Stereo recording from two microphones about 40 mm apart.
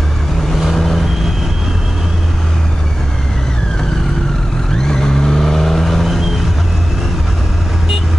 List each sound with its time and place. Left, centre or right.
0.7 s vehicle: centre
4.7 s vehicle: centre